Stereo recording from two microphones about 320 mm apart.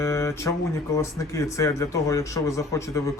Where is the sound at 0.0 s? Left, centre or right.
Centre.